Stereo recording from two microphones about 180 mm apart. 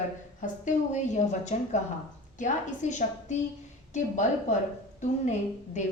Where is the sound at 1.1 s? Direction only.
40° left (ahead or behind).